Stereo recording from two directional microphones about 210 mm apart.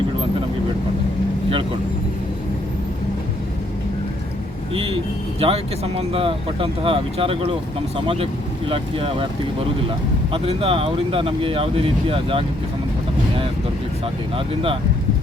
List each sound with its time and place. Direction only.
5.4 s speech: 30° right (ahead or behind)
10.3 s speech: 25° right (ahead or behind)
14.3 s speech: 25° right (ahead or behind)